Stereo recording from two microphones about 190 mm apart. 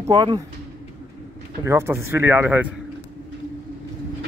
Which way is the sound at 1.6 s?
15° right (ahead or behind).